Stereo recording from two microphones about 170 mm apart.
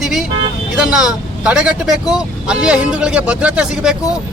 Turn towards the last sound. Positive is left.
turn(degrees=-5)  # may be behind; listen again after turning